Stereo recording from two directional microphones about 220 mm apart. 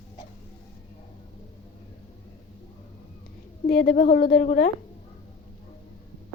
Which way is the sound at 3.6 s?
45° left (ahead or behind).